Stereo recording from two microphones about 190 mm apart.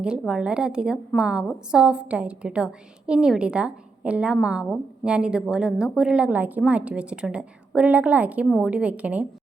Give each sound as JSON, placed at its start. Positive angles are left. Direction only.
{"t": 0.0, "sound": "a woman's voice", "side_deg": -5}